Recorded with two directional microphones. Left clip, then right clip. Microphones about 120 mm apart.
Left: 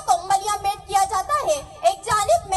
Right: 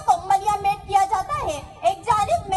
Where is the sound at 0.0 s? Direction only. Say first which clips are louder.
Right 1 dB; 35° left (ahead or behind).